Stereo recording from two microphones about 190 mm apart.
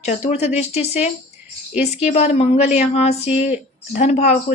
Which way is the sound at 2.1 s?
35° left (ahead or behind).